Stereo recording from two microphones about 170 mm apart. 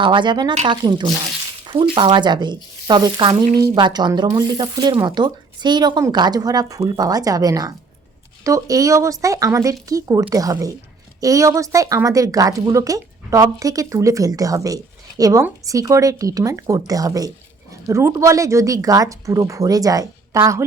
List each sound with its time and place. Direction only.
0.0 s speech: 30° right (ahead or behind)